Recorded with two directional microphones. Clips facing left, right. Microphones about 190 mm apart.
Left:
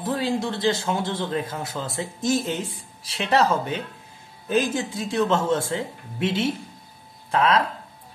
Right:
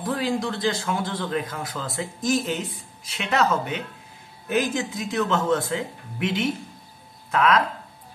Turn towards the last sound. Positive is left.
turn(degrees=30)  # may be behind; listen again after turning